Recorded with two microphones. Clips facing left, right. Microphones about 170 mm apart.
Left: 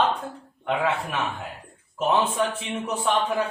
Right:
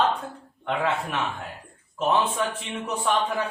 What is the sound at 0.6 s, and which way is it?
A man's voice, 5° left (ahead or behind).